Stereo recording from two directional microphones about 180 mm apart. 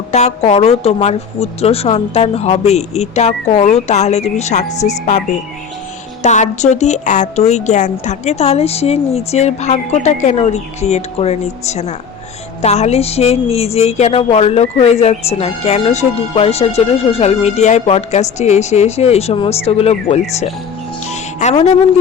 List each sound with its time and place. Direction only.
0.1 s speech: 40° left (ahead or behind)
21.1 s music: 40° left (ahead or behind)